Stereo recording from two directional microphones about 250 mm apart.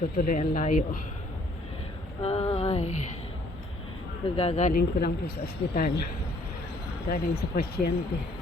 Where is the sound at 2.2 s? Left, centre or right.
Left.